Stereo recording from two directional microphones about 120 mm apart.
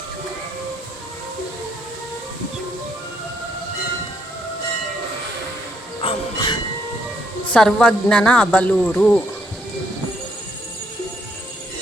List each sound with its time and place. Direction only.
6.0 s train: 45° left (ahead or behind)
7.4 s speech: 10° left (ahead or behind)